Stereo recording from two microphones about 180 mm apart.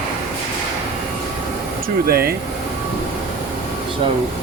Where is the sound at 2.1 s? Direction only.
60° right (ahead or behind).